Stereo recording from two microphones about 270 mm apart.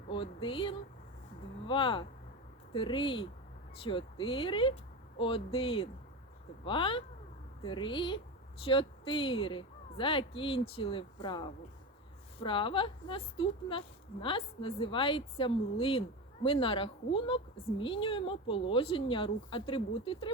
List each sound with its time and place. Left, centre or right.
0.1 s a woman's voice: centre